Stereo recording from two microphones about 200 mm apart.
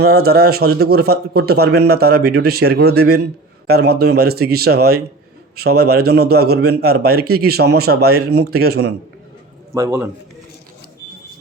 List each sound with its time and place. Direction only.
0.0 s speech: 50° right (ahead or behind)
9.7 s a man's voice: 15° right (ahead or behind)